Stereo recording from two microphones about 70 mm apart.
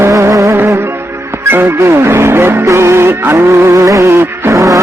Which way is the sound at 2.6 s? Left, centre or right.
Right.